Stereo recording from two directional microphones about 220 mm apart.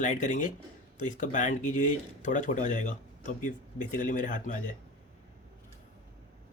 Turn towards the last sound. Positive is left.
turn(degrees=35)  # may be behind; listen again after turning